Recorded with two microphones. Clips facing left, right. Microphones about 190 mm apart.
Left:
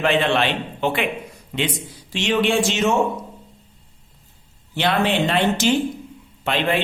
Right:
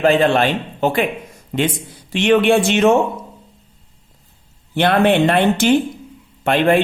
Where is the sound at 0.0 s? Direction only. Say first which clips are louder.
Right 5 dB; 40° right (ahead or behind).